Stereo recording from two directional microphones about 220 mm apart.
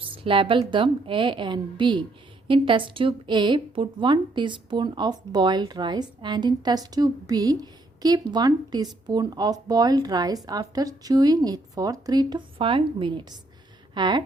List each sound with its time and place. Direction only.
0.0 s a woman's voice: 25° right (ahead or behind)